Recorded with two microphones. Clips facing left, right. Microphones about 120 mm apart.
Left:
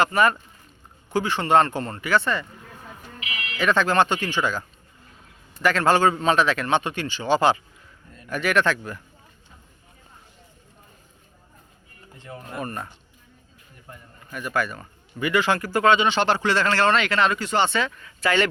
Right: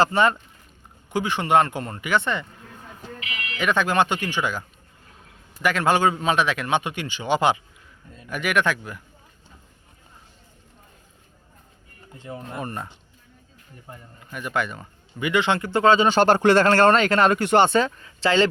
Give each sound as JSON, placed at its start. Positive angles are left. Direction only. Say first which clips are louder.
{"t": 0.0, "sound": "speech", "louder": "right 1 dB", "side_deg": -25}
{"t": 1.1, "sound": "a man's voice", "louder": "even", "side_deg": -15}
{"t": 3.6, "sound": "a man's voice", "louder": "left 1 dB", "side_deg": -15}
{"t": 12.2, "sound": "a man's voice", "louder": "right 1 dB", "side_deg": -15}
{"t": 17.7, "sound": "speech", "louder": "right 5 dB", "side_deg": -40}